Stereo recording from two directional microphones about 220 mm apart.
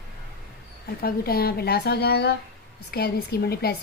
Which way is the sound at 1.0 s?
45° left (ahead or behind).